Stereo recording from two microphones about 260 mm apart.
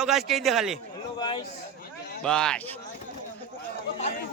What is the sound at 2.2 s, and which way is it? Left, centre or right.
Speech, centre.